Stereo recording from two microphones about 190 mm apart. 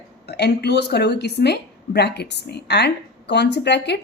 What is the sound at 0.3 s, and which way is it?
A woman's voice, 60° left (ahead or behind).